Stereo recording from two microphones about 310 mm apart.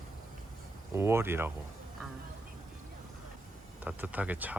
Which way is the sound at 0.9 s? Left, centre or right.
Centre.